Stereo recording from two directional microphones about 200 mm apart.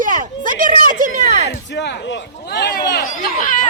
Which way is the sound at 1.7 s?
60° left (ahead or behind).